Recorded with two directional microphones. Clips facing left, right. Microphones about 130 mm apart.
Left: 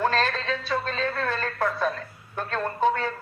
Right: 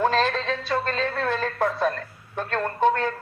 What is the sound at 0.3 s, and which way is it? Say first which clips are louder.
Music: right 2 dB; 50° right (ahead or behind).